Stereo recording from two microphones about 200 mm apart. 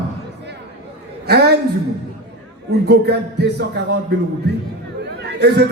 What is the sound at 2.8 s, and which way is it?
Speech, 55° right (ahead or behind).